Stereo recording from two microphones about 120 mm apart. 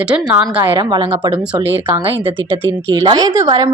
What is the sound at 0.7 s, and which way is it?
Speech, 40° right (ahead or behind).